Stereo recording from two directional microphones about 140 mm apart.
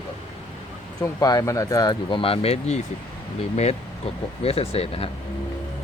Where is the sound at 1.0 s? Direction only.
25° left (ahead or behind); by 5.1 s 45° left (ahead or behind).